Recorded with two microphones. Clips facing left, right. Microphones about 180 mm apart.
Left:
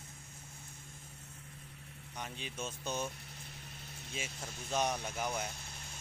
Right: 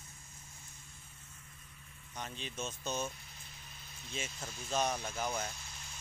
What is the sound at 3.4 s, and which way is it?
Vehicle, 65° left (ahead or behind).